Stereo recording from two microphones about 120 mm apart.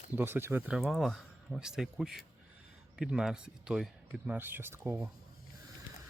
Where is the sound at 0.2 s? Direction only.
15° right (ahead or behind).